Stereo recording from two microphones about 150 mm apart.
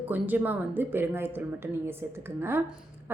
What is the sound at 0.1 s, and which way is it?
A woman's voice, 10° right (ahead or behind).